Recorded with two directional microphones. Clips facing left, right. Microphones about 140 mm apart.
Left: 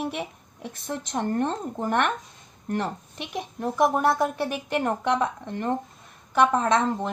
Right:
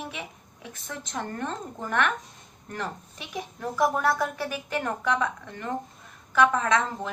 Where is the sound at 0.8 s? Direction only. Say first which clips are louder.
Left 6 dB; 30° left (ahead or behind).